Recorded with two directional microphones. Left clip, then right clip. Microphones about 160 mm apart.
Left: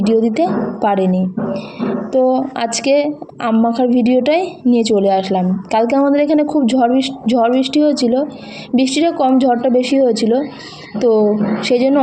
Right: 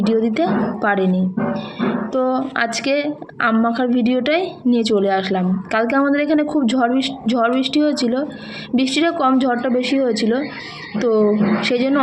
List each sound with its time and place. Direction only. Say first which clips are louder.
0.0 s a woman's voice: left 4 dB; 30° left (ahead or behind)